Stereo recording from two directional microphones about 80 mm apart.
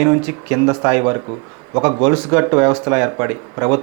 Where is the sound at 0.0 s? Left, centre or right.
Centre.